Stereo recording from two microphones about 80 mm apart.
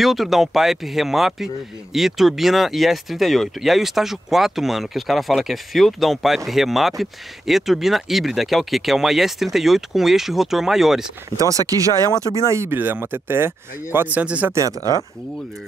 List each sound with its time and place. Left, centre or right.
0.0 s speech: centre
11.3 s speech: right
12.1 s speech: left
12.4 s speech: right; by 14.5 s centre